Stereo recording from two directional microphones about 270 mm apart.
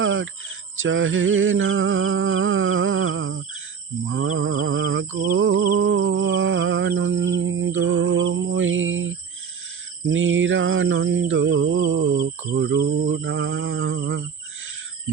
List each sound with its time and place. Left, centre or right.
0.0 s cricket: right
0.8 s mantra: right
5.5 s music: right
10.1 s mantra: right